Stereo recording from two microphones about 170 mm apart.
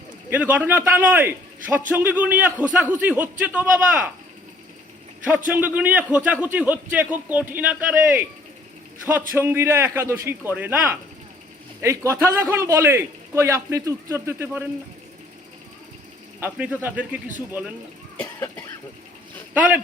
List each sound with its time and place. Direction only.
0.3 s a man's voice: 10° right (ahead or behind)
5.5 s a man's voice: 10° right (ahead or behind)
9.3 s a man's voice: 15° right (ahead or behind)
16.4 s a man's voice: 10° right (ahead or behind)
18.2 s cough: 15° left (ahead or behind)
19.5 s a man's voice: 10° right (ahead or behind)